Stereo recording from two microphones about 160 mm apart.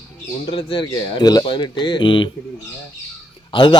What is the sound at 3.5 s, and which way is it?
Speech, 30° left (ahead or behind).